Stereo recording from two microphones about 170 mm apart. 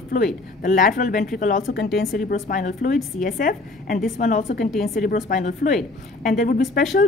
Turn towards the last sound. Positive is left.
turn(degrees=50)  # may be behind; listen again after turning